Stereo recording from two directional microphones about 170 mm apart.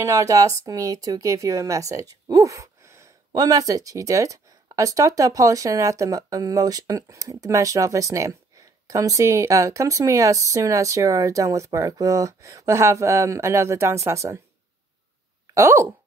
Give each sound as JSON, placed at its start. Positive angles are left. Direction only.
{"t": 0.0, "sound": "a woman's voice", "side_deg": -20}
{"t": 15.5, "sound": "speech", "side_deg": -15}